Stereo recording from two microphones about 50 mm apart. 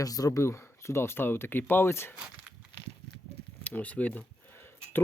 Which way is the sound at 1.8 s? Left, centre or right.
Left.